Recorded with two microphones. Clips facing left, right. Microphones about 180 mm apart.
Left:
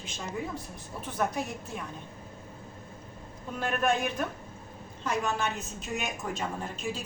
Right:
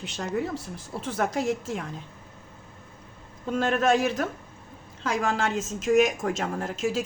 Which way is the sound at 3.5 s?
90° right.